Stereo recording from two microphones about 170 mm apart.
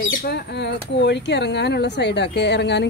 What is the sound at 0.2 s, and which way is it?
Speech, 80° left.